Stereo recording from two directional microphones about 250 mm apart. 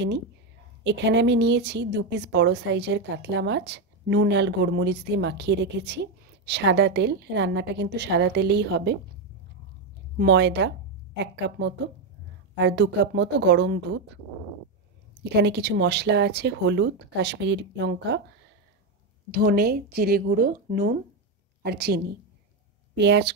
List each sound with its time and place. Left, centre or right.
0.8 s speech: right
10.1 s speech: right
15.3 s speech: right
19.3 s speech: right